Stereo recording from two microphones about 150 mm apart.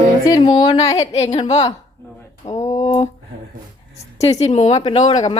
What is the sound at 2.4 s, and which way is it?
Speech, 20° left (ahead or behind).